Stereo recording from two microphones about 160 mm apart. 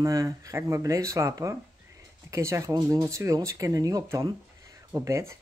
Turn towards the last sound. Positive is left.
turn(degrees=-20)  # may be behind; listen again after turning